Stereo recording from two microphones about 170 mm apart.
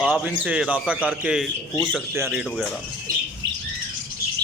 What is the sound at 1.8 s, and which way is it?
Speech, 5° left (ahead or behind).